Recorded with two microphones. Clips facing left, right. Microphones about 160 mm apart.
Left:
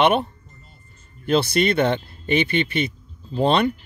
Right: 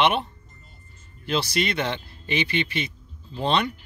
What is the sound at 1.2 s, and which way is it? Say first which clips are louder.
Speech: left 6 dB; 55° left (ahead or behind).